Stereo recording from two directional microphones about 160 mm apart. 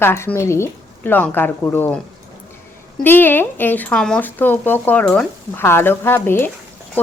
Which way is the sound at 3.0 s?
10° left (ahead or behind).